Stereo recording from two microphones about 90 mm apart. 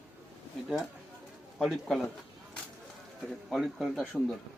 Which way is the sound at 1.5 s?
Centre (ahead or behind).